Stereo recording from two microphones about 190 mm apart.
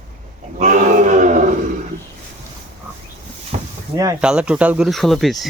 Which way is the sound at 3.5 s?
35° right (ahead or behind).